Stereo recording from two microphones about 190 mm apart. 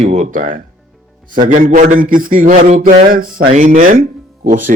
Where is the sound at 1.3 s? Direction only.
45° right (ahead or behind).